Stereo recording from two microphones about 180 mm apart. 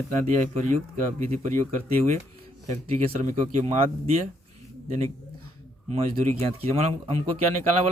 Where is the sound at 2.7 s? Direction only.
40° right (ahead or behind).